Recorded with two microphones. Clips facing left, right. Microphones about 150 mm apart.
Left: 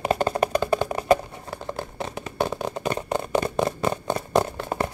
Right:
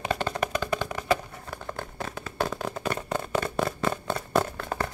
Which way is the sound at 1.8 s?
20° left (ahead or behind).